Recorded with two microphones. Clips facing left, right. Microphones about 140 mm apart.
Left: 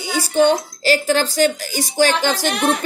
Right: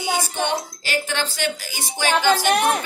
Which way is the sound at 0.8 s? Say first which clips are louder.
Left 8 dB; 40° left (ahead or behind).